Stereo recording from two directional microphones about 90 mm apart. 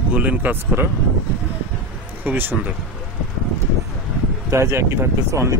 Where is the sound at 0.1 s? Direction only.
20° right (ahead or behind).